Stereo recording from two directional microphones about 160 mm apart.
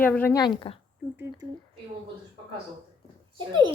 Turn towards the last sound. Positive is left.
turn(degrees=-30)  # may be behind; listen again after turning